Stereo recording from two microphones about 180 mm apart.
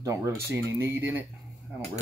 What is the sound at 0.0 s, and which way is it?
Speech, 15° right (ahead or behind).